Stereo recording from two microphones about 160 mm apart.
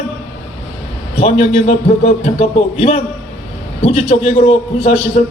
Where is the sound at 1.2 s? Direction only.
40° left (ahead or behind).